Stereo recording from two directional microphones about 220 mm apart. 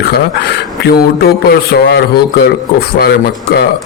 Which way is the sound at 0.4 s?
45° left (ahead or behind).